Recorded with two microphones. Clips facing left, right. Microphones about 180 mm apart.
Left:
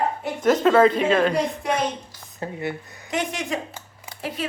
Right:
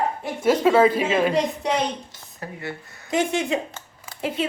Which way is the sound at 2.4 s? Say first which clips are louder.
Left 4 dB; 20° left (ahead or behind).